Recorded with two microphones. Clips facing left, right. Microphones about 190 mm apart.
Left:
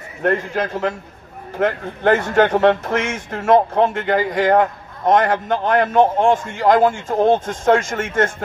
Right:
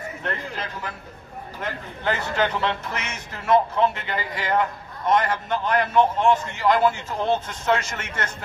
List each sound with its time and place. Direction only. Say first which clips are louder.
0.2 s a man's voice: left 14 dB; 50° left (ahead or behind)